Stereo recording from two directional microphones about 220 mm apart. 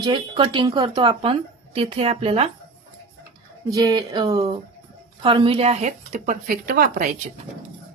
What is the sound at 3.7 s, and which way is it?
A woman's voice, 15° right (ahead or behind).